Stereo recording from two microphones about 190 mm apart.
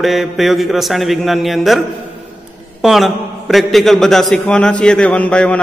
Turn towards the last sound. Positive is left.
turn(degrees=5)  # may be behind; listen again after turning